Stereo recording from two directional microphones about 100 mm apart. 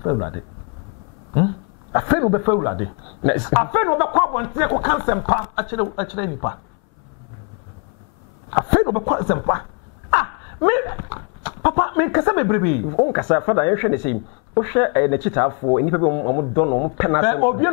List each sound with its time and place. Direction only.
0.0 s speech: 25° left (ahead or behind)
1.3 s speech: 25° left (ahead or behind)
8.5 s speech: 20° left (ahead or behind)